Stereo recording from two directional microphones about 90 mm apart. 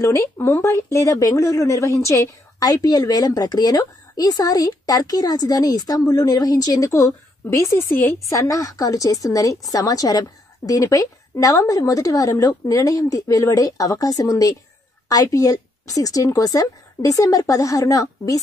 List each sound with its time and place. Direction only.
0.0 s speech: 35° left (ahead or behind)